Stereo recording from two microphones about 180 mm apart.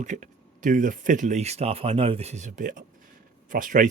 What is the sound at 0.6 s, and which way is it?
Speech, 45° right (ahead or behind).